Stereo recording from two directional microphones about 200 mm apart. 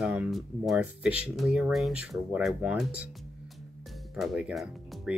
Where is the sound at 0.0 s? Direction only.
5° right (ahead or behind).